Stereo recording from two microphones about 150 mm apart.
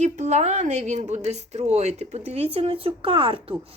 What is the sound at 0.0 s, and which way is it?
A woman's voice, 50° right (ahead or behind).